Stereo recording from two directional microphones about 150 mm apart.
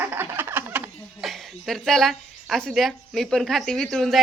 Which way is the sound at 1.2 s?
Centre (ahead or behind).